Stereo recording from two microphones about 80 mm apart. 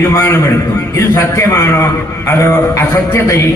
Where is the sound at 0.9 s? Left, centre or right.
Left.